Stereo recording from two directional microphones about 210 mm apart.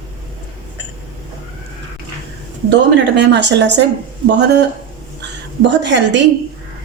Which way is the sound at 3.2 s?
55° right (ahead or behind).